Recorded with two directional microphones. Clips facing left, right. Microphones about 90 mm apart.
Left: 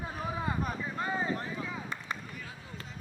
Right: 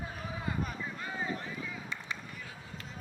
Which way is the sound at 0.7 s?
40° left (ahead or behind).